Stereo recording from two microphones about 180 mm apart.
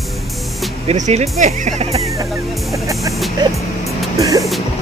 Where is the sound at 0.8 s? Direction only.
40° right (ahead or behind).